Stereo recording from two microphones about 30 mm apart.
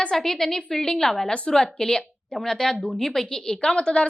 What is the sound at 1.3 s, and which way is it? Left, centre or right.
Speech, left.